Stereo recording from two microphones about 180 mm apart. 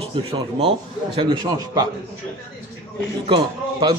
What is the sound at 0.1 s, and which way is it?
A man's voice, 30° right (ahead or behind).